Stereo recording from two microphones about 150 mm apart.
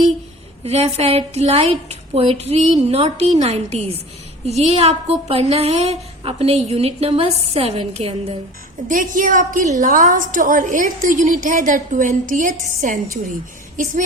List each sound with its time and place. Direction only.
0.6 s a woman's voice: 45° right (ahead or behind)
1.9 s female singing: 45° right (ahead or behind)
2.9 s a woman's voice: 45° right (ahead or behind)
8.9 s a woman's voice: 65° right (ahead or behind)